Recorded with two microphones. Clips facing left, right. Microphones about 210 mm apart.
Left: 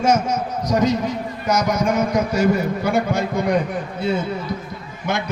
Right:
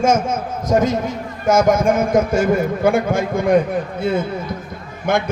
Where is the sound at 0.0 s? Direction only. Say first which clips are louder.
Right 1 dB; 50° right (ahead or behind).